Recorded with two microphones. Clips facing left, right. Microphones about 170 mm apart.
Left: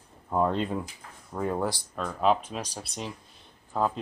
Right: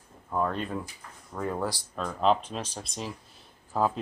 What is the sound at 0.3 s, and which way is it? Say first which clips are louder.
Speech: left 3 dB; 20° left (ahead or behind).